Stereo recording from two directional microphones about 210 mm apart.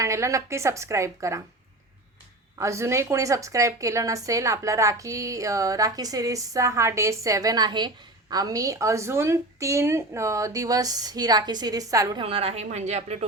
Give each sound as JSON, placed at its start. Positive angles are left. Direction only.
{"t": 0.0, "sound": "a woman's voice", "side_deg": -15}
{"t": 2.6, "sound": "a woman's voice", "side_deg": -15}